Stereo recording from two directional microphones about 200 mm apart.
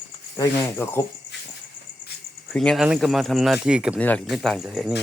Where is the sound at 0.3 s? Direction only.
15° left (ahead or behind).